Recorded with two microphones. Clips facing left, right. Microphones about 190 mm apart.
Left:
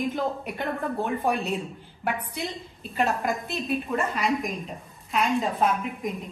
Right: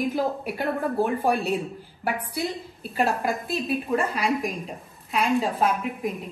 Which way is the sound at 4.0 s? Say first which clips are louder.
Even; 35° right (ahead or behind).